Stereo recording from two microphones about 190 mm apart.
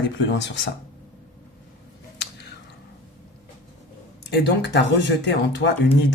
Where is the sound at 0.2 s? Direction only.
70° left (ahead or behind).